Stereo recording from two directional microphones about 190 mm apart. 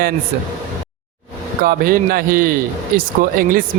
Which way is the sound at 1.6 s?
50° right (ahead or behind).